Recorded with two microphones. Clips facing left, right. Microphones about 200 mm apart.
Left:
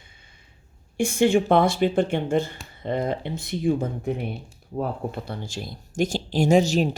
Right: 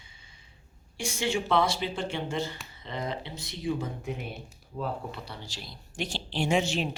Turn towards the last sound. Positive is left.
turn(degrees=40)  # may be behind; listen again after turning